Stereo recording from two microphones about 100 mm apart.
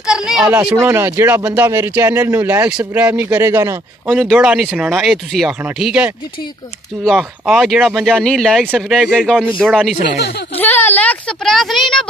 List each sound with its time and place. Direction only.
0.0 s a sound: 5° right (ahead or behind)
0.5 s speech: 15° right (ahead or behind)
0.8 s speech: 25° right (ahead or behind)
4.1 s speech: 5° right (ahead or behind)
10.6 s speech: 20° left (ahead or behind)
11.4 s speech: centre (ahead or behind)